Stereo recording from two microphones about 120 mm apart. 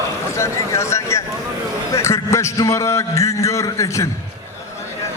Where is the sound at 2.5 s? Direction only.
25° left (ahead or behind).